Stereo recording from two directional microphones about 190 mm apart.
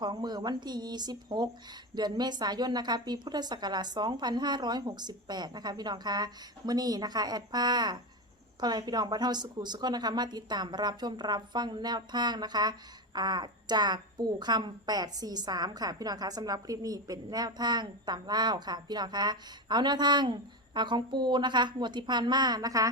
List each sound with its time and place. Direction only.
0.0 s a woman's voice: 20° right (ahead or behind)